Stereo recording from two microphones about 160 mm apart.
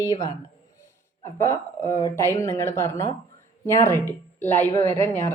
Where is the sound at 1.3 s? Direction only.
15° left (ahead or behind).